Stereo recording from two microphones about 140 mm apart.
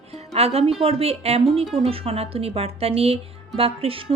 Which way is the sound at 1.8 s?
45° right (ahead or behind).